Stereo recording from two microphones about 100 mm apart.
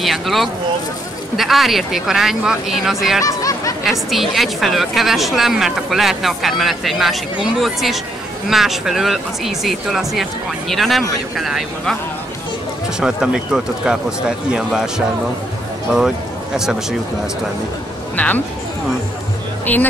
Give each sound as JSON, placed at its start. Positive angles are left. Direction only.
{"t": 0.0, "sound": "speech", "side_deg": 0}
{"t": 3.3, "sound": "a sound", "side_deg": 35}
{"t": 4.1, "sound": "speech", "side_deg": 0}
{"t": 13.0, "sound": "speech", "side_deg": -10}
{"t": 18.1, "sound": "speech", "side_deg": 15}
{"t": 19.6, "sound": "speech", "side_deg": 15}